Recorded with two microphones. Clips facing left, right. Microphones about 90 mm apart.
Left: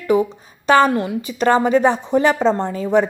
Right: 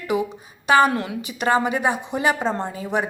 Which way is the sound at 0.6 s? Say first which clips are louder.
Left 3 dB; 15° right (ahead or behind).